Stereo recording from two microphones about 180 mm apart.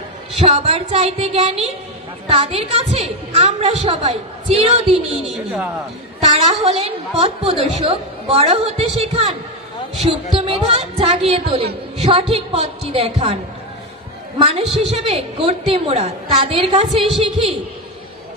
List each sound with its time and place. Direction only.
0.5 s a woman's voice: 35° right (ahead or behind)
5.2 s a man's voice: 5° right (ahead or behind)
6.3 s a woman's voice: 35° right (ahead or behind)
14.4 s a woman's voice: 35° right (ahead or behind)
17.0 s a man's voice: centre (ahead or behind)